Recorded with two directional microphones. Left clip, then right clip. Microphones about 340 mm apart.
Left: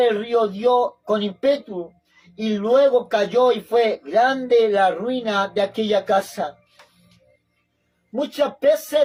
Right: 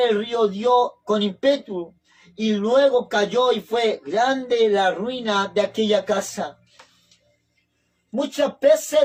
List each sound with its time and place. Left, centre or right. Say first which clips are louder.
0.0 s speech: left 1 dB; centre
8.4 s speech: even; centre